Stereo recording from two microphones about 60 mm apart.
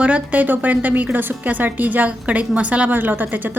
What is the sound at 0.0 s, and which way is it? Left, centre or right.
A woman's voice, right.